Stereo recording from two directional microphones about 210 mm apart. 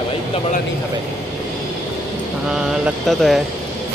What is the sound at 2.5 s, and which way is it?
Speech, 5° right (ahead or behind).